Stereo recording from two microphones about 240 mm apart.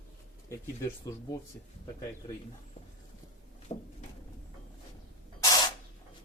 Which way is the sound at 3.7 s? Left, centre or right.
Left.